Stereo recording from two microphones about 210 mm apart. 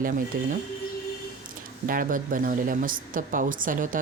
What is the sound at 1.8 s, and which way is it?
A woman's voice, 40° right (ahead or behind).